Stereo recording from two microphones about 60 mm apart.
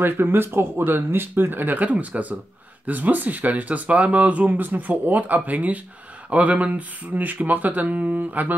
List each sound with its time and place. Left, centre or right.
0.0 s speech: right